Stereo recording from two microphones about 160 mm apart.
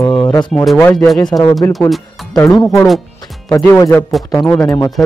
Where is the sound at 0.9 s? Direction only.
Centre (ahead or behind).